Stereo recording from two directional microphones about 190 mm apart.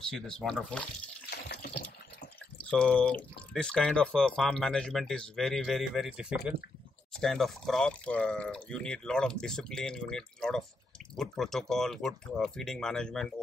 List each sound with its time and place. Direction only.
0.1 s speech: 5° left (ahead or behind)
1.3 s water: 60° left (ahead or behind)
2.7 s speech: 5° left (ahead or behind)